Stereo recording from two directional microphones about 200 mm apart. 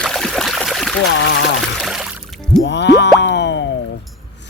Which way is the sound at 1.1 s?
65° left (ahead or behind).